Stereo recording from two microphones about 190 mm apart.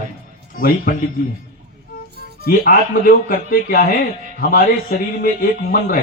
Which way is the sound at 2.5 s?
50° left (ahead or behind).